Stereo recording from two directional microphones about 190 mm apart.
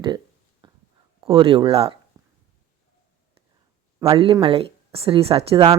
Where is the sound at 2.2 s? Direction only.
20° right (ahead or behind).